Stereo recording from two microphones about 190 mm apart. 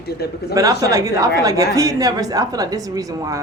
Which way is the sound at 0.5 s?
20° right (ahead or behind).